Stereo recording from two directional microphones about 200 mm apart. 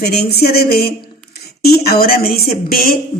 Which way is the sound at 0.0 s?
55° left (ahead or behind).